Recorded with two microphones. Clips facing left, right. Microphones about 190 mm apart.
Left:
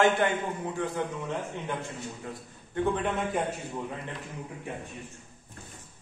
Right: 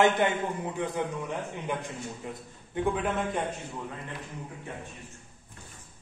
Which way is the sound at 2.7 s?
10° right (ahead or behind).